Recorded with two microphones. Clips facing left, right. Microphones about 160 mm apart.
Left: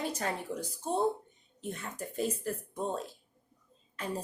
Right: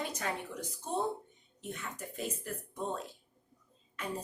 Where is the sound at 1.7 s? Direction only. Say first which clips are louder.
Left 3 dB; 35° left (ahead or behind).